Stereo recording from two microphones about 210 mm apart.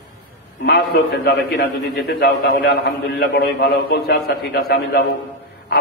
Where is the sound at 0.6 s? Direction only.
50° left (ahead or behind).